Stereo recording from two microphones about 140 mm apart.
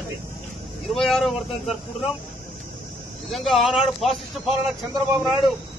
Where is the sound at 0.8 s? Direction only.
Centre (ahead or behind).